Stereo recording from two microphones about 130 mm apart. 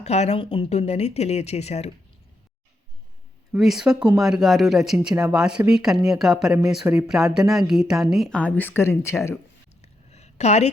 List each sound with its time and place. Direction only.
0.0 s speech: 55° left (ahead or behind)
3.5 s speech: 5° right (ahead or behind)
6.8 s speech: 15° right (ahead or behind)
7.3 s speech: 5° right (ahead or behind)
8.4 s speech: 10° left (ahead or behind)
9.8 s a sound: 55° left (ahead or behind)